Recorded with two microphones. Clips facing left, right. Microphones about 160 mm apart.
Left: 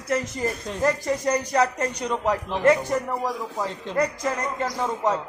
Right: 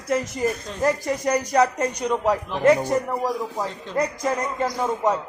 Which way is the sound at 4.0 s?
15° right (ahead or behind).